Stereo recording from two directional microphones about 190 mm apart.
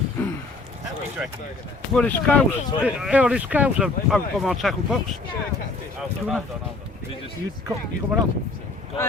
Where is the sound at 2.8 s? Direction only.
5° right (ahead or behind).